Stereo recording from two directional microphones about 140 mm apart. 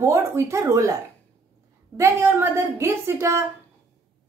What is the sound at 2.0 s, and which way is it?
Speech, 20° right (ahead or behind).